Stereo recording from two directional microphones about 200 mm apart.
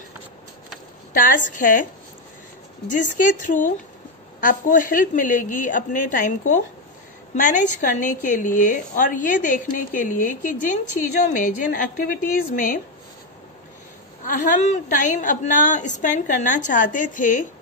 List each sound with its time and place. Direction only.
1.1 s a woman's voice: 40° left (ahead or behind)
2.9 s a woman's voice: 40° left (ahead or behind)
7.3 s a woman's voice: 40° left (ahead or behind)
14.2 s a woman's voice: 40° left (ahead or behind)